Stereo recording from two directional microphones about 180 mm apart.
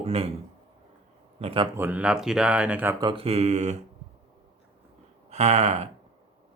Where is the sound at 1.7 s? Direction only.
10° right (ahead or behind).